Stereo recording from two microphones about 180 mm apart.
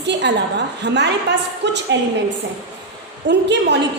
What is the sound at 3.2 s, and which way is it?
Speech, 75° right (ahead or behind).